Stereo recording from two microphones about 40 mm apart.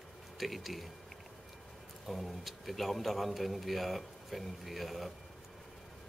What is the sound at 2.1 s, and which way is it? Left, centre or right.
A woman's voice, centre.